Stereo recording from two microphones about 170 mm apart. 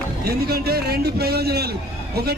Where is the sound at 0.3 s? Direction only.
65° right (ahead or behind).